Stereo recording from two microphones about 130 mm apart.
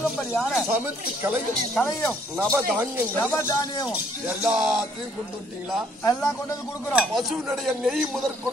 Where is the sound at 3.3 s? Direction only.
20° left (ahead or behind).